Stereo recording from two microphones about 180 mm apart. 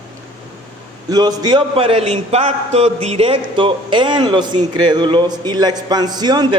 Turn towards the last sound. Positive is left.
turn(degrees=-25)  # may be behind; listen again after turning